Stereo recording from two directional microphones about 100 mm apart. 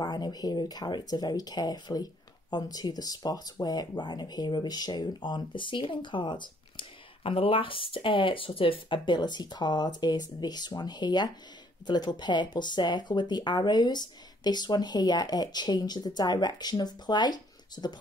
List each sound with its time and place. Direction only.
0.0 s speech: 45° left (ahead or behind)